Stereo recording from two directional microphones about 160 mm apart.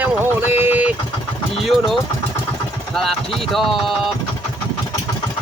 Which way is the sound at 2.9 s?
Centre (ahead or behind).